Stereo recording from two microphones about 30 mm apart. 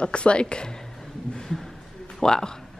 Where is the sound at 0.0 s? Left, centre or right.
Left.